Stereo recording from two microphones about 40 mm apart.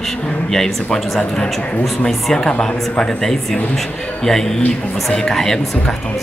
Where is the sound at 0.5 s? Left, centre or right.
Centre.